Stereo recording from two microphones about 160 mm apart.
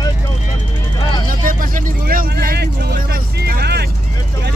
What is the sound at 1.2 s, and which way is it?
Vehicle, 60° right (ahead or behind).